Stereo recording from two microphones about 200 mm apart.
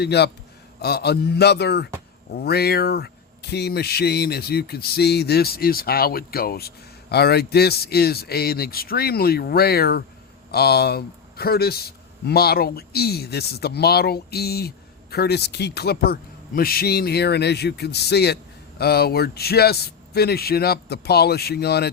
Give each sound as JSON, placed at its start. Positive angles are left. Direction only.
{"t": 0.0, "sound": "speech", "side_deg": 55}